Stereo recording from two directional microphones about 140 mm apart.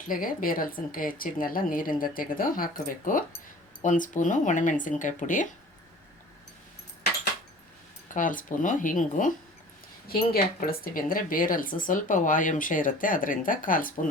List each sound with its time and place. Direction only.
0.1 s speech: 90° left
3.8 s speech: 65° left (ahead or behind)
8.1 s speech: 70° left (ahead or behind)
10.1 s speech: 90° left